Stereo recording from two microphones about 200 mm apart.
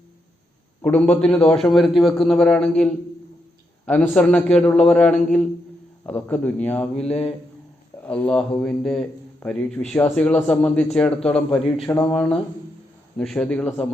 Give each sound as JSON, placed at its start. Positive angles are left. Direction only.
{"t": 0.8, "sound": "speech", "side_deg": 5}
{"t": 7.1, "sound": "speech", "side_deg": 30}
{"t": 8.0, "sound": "speech", "side_deg": 5}